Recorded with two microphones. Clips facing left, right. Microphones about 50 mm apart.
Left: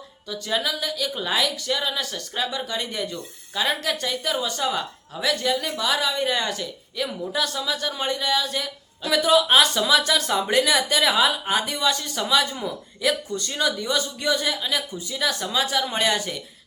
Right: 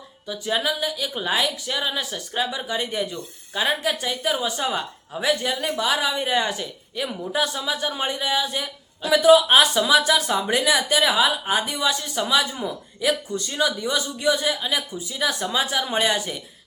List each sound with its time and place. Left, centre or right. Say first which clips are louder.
0.3 s speech: right 2 dB; centre
13.8 s speech: right 2 dB; centre